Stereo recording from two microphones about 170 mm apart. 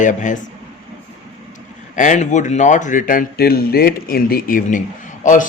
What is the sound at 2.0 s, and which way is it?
Speech, 45° left (ahead or behind).